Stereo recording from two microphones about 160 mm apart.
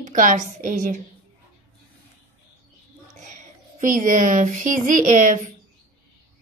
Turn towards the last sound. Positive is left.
turn(degrees=-55)  # may be behind; listen again after turning